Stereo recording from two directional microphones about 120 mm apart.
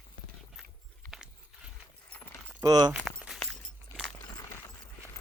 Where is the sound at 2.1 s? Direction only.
20° left (ahead or behind).